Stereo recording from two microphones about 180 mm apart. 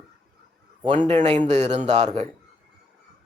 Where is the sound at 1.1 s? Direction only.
40° right (ahead or behind).